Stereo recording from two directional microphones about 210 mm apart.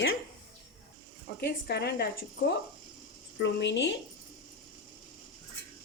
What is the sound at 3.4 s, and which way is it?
Speech, 60° left (ahead or behind).